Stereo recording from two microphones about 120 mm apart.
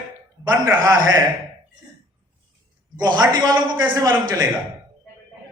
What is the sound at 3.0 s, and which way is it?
Speech, 35° right (ahead or behind).